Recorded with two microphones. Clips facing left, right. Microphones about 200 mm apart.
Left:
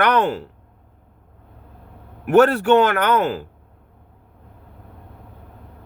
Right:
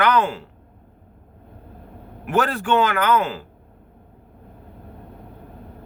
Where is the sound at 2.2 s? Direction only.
60° left (ahead or behind).